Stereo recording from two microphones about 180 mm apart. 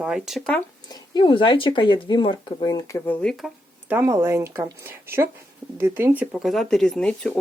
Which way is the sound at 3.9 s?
15° right (ahead or behind).